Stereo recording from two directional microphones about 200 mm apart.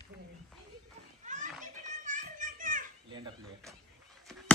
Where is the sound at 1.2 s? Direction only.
40° right (ahead or behind).